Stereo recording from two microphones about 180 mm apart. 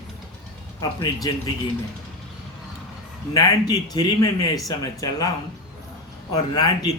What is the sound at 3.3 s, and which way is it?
Speech, 20° left (ahead or behind).